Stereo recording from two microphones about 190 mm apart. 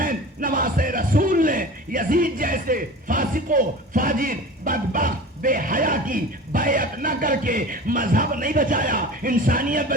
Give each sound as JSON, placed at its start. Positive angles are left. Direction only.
{"t": 0.0, "sound": "speech", "side_deg": -45}